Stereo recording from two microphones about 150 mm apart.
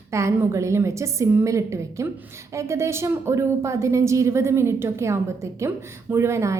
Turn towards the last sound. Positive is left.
turn(degrees=-20)  # may be behind; listen again after turning